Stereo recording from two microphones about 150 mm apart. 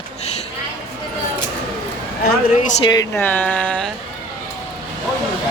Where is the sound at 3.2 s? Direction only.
10° left (ahead or behind).